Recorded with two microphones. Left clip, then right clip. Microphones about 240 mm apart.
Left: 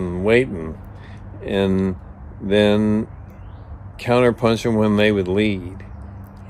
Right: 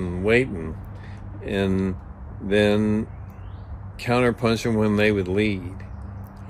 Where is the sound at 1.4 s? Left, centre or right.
Centre.